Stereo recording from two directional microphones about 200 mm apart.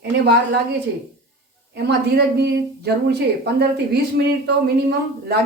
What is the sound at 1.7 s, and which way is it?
A woman's voice, 55° right (ahead or behind).